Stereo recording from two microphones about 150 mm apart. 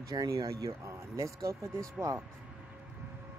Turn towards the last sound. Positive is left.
turn(degrees=-20)  # may be behind; listen again after turning